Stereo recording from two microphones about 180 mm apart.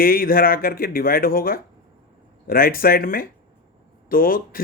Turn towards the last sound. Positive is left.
turn(degrees=50)  # may be behind; listen again after turning